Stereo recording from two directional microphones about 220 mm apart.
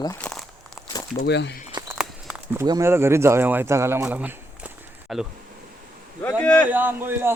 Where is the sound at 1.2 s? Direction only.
50° left (ahead or behind).